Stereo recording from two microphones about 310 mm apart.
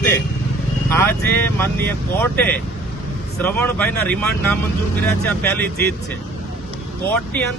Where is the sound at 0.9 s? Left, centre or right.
Centre.